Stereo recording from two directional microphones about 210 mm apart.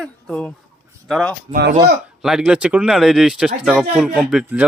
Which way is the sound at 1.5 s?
50° right (ahead or behind).